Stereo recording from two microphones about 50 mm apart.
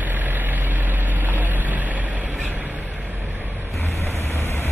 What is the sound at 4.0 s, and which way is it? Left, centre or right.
Vehicle, left.